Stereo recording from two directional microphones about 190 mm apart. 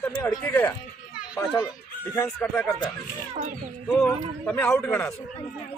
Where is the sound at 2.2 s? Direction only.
10° left (ahead or behind).